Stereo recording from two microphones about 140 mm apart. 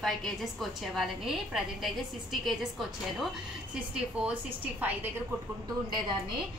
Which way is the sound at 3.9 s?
10° right (ahead or behind).